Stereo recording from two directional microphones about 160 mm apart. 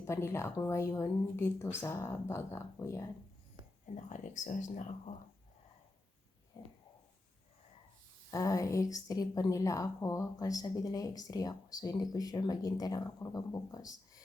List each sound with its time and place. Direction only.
0.0 s speech: 15° left (ahead or behind)
3.8 s speech: 50° left (ahead or behind)
8.3 s a woman's voice: 20° left (ahead or behind)